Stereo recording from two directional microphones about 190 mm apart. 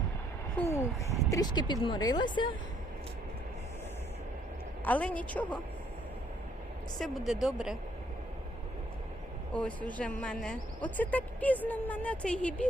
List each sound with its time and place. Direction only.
0.5 s a sound: 15° left (ahead or behind)
1.3 s speech: 20° left (ahead or behind)
4.9 s speech: 5° left (ahead or behind)
7.0 s speech: centre (ahead or behind)
9.5 s speech: 5° left (ahead or behind)